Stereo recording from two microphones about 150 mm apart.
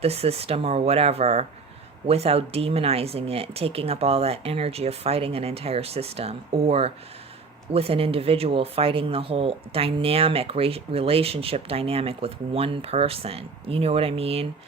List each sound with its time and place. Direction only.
0.0 s speech: 40° right (ahead or behind)